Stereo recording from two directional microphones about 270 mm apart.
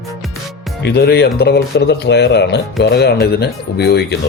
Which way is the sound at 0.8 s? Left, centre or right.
Left.